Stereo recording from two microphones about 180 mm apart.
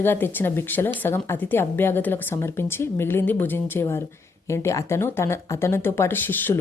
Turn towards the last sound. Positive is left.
turn(degrees=10)  # may be behind; listen again after turning